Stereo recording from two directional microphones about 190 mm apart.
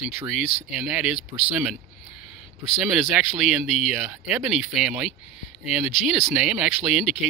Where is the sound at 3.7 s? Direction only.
5° right (ahead or behind).